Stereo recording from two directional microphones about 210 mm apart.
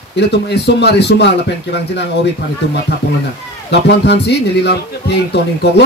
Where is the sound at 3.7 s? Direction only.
55° left (ahead or behind).